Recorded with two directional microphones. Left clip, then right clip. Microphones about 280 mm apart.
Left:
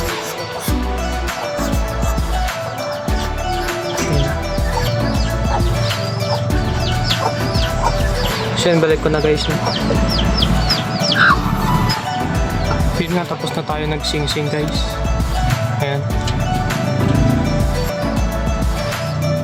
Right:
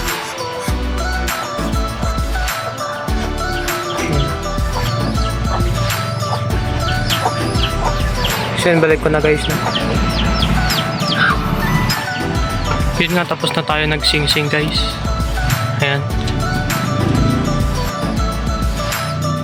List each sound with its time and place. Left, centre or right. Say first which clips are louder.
8.6 s speech: right 2 dB; centre
10.7 s music: even; left
13.0 s speech: right 4 dB; centre